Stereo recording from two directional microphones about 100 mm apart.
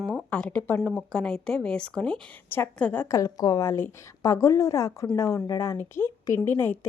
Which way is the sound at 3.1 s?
35° left (ahead or behind).